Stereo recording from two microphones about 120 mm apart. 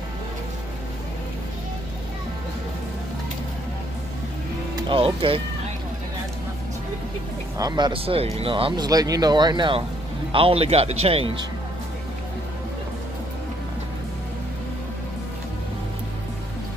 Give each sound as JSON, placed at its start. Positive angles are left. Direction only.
{"t": 4.8, "sound": "speech", "side_deg": -50}
{"t": 7.5, "sound": "speech", "side_deg": -35}
{"t": 8.0, "sound": "speech", "side_deg": -55}
{"t": 8.8, "sound": "speech", "side_deg": -30}
{"t": 10.3, "sound": "a man's voice", "side_deg": -50}